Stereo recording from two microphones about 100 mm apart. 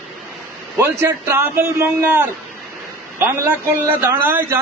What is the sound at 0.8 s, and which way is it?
Speech, 25° right (ahead or behind).